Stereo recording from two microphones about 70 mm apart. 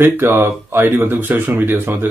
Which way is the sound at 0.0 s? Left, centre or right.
Right.